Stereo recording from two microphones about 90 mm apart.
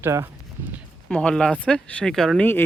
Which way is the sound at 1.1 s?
10° left (ahead or behind).